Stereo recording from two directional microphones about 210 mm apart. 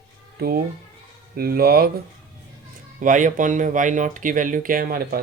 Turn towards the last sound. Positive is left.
turn(degrees=-45)  # may be behind; listen again after turning